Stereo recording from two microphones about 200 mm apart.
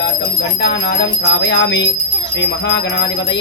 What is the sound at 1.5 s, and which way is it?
Music, 65° left (ahead or behind).